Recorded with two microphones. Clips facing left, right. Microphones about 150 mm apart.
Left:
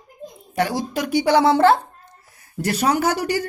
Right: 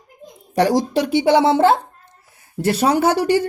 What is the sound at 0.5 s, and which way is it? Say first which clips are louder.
A woman's voice: right 6 dB; 40° right (ahead or behind).